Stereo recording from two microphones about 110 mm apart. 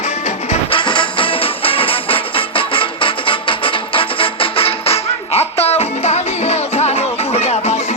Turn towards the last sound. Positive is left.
turn(degrees=70)  # may be behind; listen again after turning